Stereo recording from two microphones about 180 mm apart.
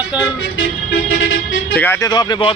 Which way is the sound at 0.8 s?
80° left.